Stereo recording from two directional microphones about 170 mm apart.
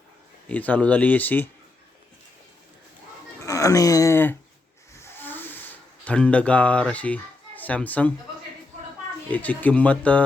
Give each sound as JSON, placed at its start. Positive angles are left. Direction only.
{"t": 0.4, "sound": "speech", "side_deg": 10}
{"t": 3.4, "sound": "a sound", "side_deg": 20}
{"t": 4.9, "sound": "hiss", "side_deg": 10}
{"t": 6.1, "sound": "speech", "side_deg": 5}
{"t": 9.3, "sound": "speech", "side_deg": 10}